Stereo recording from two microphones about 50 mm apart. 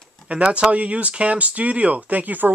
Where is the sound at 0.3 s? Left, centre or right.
Right.